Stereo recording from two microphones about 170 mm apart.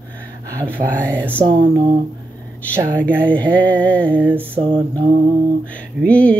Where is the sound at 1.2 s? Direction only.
10° right (ahead or behind).